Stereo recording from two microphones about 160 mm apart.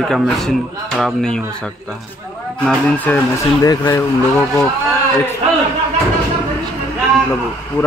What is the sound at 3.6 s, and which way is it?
Speech, 20° left (ahead or behind).